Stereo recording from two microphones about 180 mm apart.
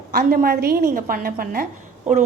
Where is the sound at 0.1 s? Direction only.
60° right (ahead or behind).